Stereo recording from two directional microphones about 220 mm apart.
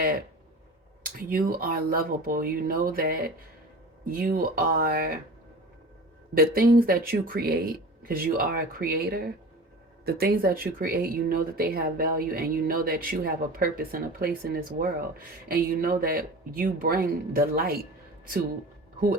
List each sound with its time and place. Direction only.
1.0 s speech: 40° right (ahead or behind)
6.3 s speech: 45° right (ahead or behind)